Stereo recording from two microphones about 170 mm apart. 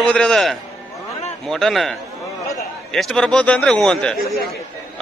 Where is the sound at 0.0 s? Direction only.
5° left (ahead or behind).